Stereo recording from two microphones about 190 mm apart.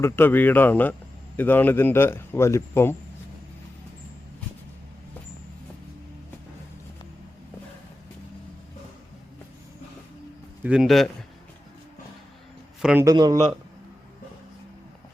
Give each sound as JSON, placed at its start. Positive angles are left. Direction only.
{"t": 0.0, "sound": "a man's voice", "side_deg": 10}
{"t": 10.6, "sound": "a man's voice", "side_deg": -5}
{"t": 12.8, "sound": "a man's voice", "side_deg": -5}
{"t": 13.1, "sound": "a man's voice", "side_deg": -20}